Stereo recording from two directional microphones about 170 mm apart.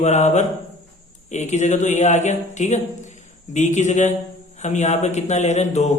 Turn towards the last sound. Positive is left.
turn(degrees=40)  # may be behind; listen again after turning